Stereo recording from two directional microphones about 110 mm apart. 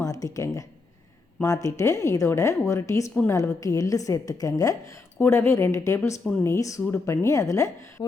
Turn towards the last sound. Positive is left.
turn(degrees=30)  # may be behind; listen again after turning